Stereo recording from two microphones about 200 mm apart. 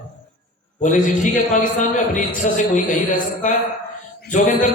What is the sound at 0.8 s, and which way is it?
A man's voice, 40° left (ahead or behind).